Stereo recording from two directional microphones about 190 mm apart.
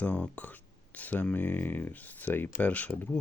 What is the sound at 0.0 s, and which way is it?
Speech, 10° left (ahead or behind).